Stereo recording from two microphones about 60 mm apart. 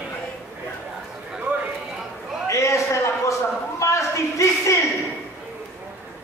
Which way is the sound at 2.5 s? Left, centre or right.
Left.